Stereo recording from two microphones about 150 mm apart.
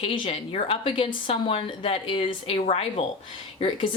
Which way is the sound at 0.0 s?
35° left (ahead or behind).